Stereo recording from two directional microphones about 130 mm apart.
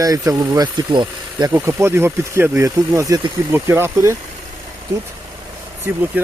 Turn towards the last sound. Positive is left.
turn(degrees=-15)  # may be behind; listen again after turning